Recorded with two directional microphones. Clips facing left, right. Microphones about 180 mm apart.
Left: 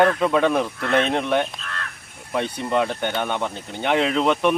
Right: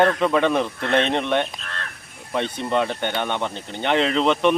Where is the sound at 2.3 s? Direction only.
5° left (ahead or behind).